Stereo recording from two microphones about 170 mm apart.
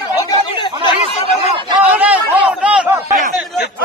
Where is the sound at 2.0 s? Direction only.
10° right (ahead or behind).